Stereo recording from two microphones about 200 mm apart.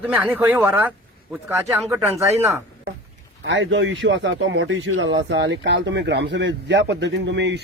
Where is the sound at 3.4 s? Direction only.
65° right (ahead or behind).